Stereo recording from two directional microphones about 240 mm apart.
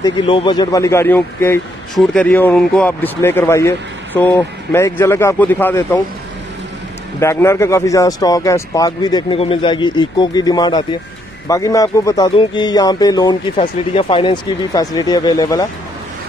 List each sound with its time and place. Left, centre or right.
0.0 s a man's voice: left
7.2 s a man's voice: centre